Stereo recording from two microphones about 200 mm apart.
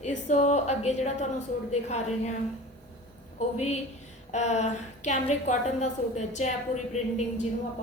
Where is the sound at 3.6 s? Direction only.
35° left (ahead or behind).